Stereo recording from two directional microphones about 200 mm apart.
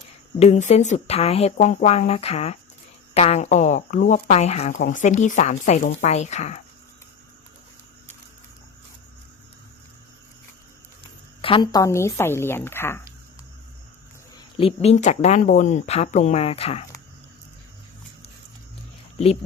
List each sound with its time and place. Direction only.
0.3 s speech: 35° left (ahead or behind)
11.4 s speech: 25° left (ahead or behind)
14.3 s speech: 25° left (ahead or behind)